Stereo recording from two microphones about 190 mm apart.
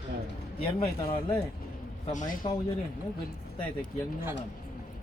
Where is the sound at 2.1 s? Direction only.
40° left (ahead or behind).